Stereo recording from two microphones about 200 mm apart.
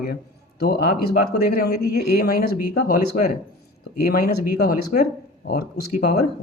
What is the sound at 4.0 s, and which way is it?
Speech, 50° left (ahead or behind).